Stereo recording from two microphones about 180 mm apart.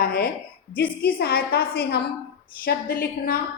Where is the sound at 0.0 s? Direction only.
50° left (ahead or behind).